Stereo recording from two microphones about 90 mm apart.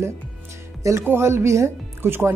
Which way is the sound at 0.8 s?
30° right (ahead or behind).